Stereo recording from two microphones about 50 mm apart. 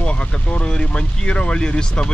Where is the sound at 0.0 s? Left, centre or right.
Left.